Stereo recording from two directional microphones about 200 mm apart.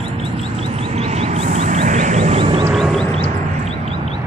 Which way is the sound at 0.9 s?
35° right (ahead or behind).